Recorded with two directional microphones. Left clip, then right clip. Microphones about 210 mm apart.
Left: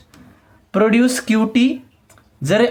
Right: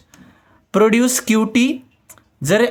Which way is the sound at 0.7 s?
35° right (ahead or behind).